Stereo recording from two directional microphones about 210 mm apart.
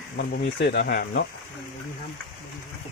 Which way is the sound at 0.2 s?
50° left (ahead or behind).